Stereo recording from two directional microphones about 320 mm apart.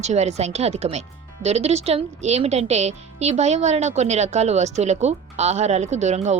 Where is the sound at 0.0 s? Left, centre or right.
Right.